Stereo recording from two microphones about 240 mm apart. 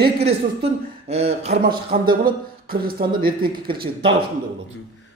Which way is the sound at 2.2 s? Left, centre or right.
Right.